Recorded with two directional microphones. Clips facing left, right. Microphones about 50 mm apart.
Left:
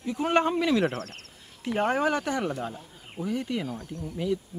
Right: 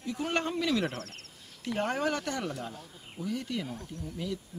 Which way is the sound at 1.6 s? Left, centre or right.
Left.